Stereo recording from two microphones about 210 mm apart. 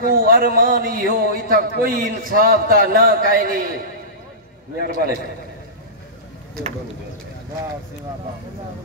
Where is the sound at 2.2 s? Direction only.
40° right (ahead or behind).